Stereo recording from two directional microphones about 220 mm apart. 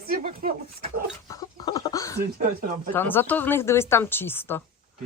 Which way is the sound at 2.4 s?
35° right (ahead or behind).